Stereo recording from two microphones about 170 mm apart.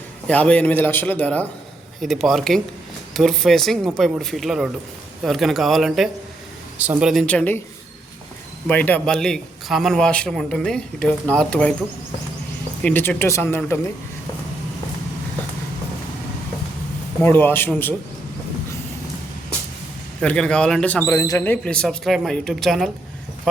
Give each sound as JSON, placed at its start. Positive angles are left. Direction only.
{"t": 0.3, "sound": "a man's voice", "side_deg": 5}
{"t": 8.6, "sound": "a man's voice", "side_deg": 10}
{"t": 12.8, "sound": "a man's voice", "side_deg": 10}
{"t": 17.2, "sound": "a man's voice", "side_deg": 10}
{"t": 20.2, "sound": "a man's voice", "side_deg": 5}